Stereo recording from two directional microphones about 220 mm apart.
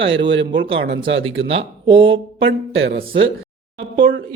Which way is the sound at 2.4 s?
60° right (ahead or behind).